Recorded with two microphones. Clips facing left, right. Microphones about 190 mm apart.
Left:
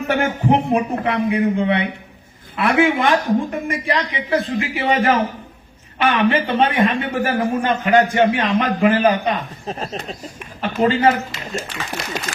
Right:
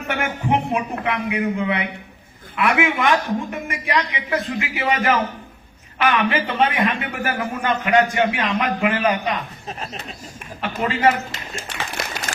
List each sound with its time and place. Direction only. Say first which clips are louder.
0.1 s a man's voice: left 4 dB; 35° left (ahead or behind)